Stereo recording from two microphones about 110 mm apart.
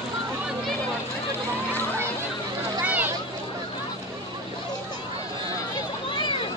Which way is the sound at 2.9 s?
15° right (ahead or behind).